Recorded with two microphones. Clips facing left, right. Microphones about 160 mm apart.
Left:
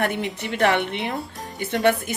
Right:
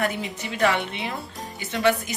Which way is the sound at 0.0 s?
60° left (ahead or behind).